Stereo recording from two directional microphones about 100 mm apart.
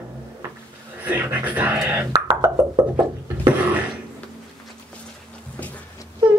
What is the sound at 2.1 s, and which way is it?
Speech, 30° right (ahead or behind).